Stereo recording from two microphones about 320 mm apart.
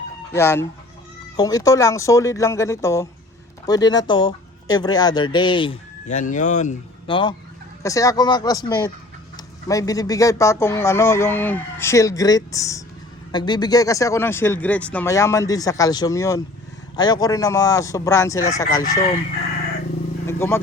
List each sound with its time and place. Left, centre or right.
0.3 s speech: centre
18.8 s speech: left
20.2 s vehicle: centre